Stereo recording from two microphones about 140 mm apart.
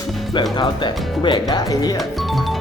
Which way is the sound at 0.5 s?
35° left (ahead or behind).